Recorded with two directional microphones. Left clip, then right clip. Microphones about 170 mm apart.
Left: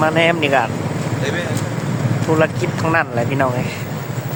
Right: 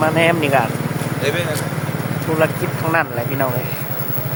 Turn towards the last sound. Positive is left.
turn(degrees=20)  # may be behind; listen again after turning